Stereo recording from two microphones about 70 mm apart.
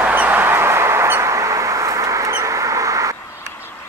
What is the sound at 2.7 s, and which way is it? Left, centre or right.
Vehicle, right.